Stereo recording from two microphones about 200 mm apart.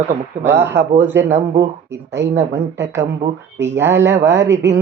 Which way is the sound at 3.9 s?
60° right (ahead or behind).